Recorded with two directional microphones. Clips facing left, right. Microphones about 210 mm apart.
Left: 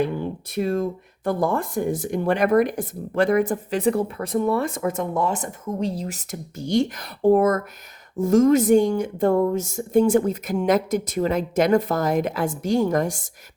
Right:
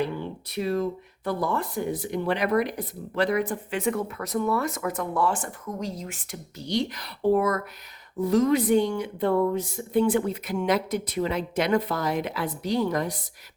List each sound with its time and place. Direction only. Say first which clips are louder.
0.0 s speech: left 5 dB; 50° left (ahead or behind)